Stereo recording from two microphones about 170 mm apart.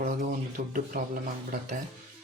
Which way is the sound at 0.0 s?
50° right (ahead or behind).